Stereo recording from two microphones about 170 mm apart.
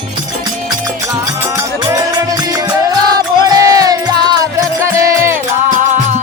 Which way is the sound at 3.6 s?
20° right (ahead or behind).